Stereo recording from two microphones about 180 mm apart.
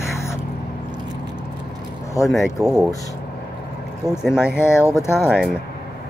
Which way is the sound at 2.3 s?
Centre (ahead or behind).